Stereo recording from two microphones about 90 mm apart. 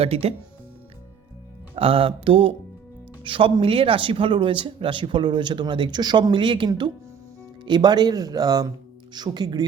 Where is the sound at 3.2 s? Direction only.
70° right (ahead or behind).